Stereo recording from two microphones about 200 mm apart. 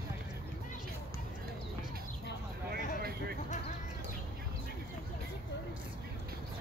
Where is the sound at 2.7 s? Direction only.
50° right (ahead or behind).